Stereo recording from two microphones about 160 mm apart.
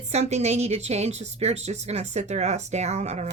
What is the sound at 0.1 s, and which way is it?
Speech, 45° right (ahead or behind).